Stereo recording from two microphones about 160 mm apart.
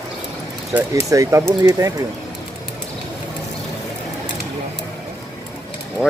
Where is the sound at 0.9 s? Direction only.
20° right (ahead or behind).